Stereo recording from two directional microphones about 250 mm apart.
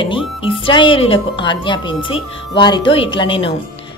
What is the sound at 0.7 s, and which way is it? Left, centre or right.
A woman's voice, centre.